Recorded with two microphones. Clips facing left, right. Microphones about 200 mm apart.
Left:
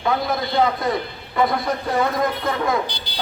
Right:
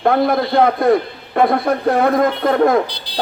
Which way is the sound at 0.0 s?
60° right (ahead or behind).